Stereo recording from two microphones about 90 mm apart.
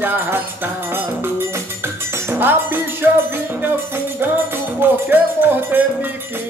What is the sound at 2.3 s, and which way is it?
Music, 25° right (ahead or behind).